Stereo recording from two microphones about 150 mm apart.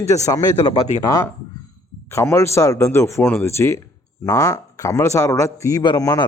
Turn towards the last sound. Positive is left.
turn(degrees=25)  # may be behind; listen again after turning